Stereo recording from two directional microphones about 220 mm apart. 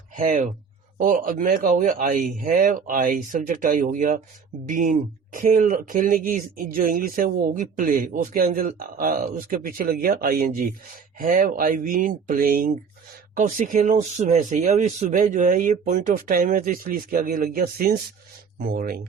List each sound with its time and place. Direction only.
0.1 s speech: 35° right (ahead or behind)